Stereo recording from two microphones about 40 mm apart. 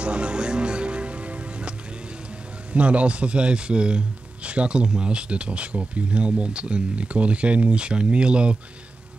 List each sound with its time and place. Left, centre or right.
0.0 s music: right
2.7 s a man's voice: right